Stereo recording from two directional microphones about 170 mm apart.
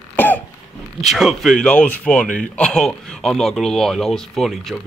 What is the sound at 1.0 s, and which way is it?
Speech, centre (ahead or behind).